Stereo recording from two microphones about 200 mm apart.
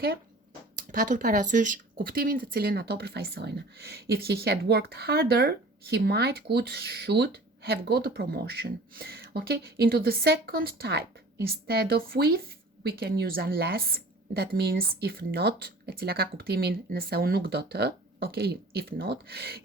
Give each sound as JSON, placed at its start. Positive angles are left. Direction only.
{"t": 0.8, "sound": "speech", "side_deg": -40}